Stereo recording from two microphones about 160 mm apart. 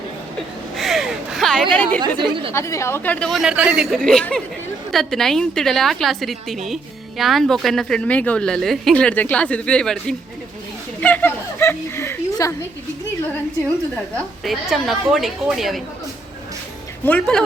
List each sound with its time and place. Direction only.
0.8 s a sound: centre (ahead or behind)
1.7 s speech: 10° left (ahead or behind)
2.0 s speech: 30° right (ahead or behind)
2.5 s speech: 15° left (ahead or behind)
13.9 s speech: centre (ahead or behind)
17.1 s speech: 5° left (ahead or behind)